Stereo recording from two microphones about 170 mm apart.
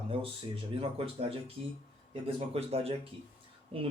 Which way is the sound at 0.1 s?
35° right (ahead or behind).